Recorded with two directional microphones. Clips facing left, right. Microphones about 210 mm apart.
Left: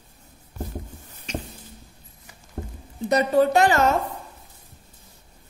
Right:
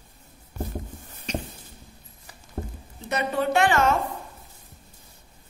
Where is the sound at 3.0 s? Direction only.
40° left (ahead or behind).